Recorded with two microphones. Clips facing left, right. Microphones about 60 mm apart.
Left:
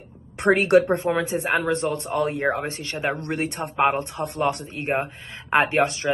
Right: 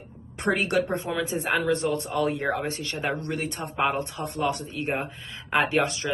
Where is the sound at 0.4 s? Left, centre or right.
Left.